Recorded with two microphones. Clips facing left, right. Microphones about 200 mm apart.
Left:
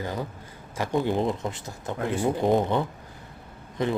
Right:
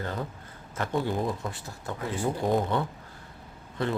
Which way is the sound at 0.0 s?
10° left (ahead or behind).